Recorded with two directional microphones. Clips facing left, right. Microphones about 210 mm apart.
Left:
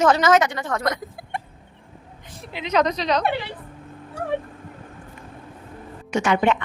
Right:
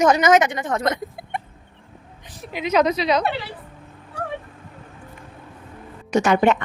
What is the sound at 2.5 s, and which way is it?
Speech, 10° right (ahead or behind).